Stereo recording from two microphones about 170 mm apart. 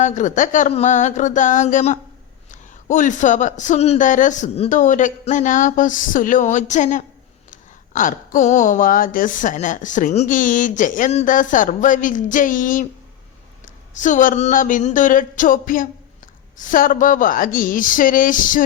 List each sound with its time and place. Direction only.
0.0 s speech: 45° left (ahead or behind)
13.9 s speech: 45° left (ahead or behind)